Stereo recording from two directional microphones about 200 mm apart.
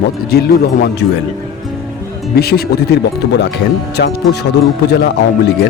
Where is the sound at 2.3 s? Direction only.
50° left (ahead or behind).